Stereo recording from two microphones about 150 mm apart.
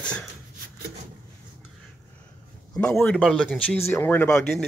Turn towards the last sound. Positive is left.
turn(degrees=10)  # may be behind; listen again after turning